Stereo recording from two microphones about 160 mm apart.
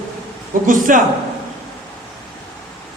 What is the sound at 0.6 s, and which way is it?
Speech, 55° right (ahead or behind).